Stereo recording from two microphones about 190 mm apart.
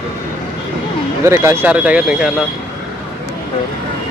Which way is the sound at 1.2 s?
15° right (ahead or behind).